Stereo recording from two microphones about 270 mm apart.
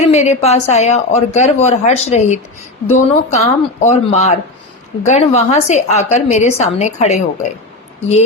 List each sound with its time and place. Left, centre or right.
0.0 s speech: left